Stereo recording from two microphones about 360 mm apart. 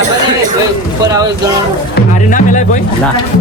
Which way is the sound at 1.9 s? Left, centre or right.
Left.